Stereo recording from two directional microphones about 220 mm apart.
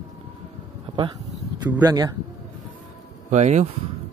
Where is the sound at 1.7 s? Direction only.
15° right (ahead or behind).